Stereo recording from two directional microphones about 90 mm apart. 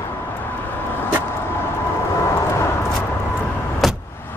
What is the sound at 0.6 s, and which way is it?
Vehicle, 25° left (ahead or behind).